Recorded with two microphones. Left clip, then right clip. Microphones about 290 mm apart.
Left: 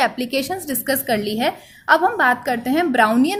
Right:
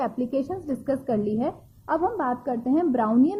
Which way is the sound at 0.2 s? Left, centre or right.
Left.